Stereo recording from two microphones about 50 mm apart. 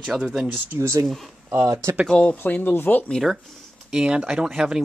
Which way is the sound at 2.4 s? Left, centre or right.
Left.